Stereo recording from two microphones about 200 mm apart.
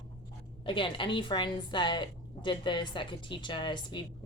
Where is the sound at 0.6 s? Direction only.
25° left (ahead or behind).